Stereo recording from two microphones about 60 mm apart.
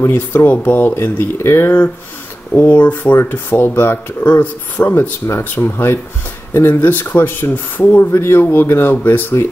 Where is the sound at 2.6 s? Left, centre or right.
Left.